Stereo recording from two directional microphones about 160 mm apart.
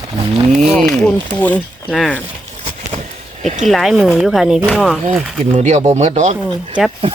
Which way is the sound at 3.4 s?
45° right (ahead or behind).